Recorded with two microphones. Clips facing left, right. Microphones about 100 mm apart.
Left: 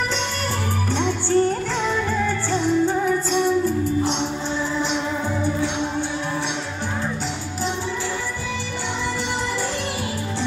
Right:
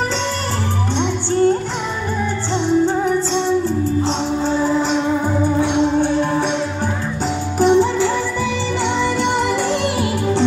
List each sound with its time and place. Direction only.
0.9 s music: 20° right (ahead or behind); by 4.8 s 40° right (ahead or behind)
7.6 s music: 70° right (ahead or behind)